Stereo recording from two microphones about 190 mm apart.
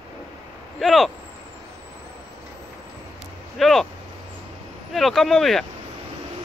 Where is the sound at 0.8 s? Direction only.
Centre (ahead or behind).